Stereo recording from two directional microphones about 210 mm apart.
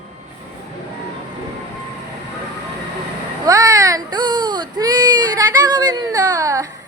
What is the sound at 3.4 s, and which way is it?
Baby cry, 15° right (ahead or behind).